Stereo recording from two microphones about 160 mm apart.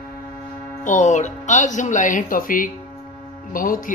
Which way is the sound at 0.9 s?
50° left (ahead or behind).